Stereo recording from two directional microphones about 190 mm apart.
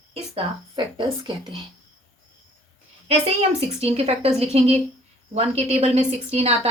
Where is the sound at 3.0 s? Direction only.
35° right (ahead or behind).